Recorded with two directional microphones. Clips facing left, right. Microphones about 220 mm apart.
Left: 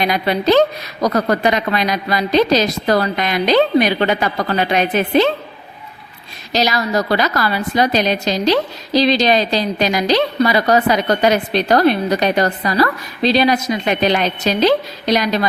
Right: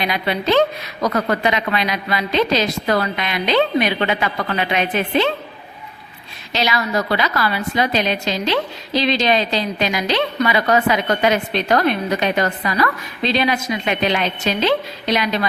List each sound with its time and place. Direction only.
0.0 s a woman's voice: 40° left (ahead or behind)
6.5 s a woman's voice: 40° left (ahead or behind)